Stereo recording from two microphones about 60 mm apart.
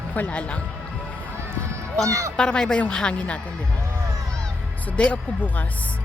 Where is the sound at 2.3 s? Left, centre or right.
Centre.